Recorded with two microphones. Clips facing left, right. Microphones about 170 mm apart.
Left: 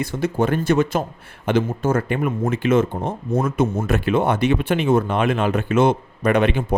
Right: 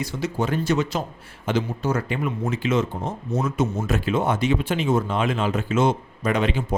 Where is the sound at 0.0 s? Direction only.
55° left (ahead or behind).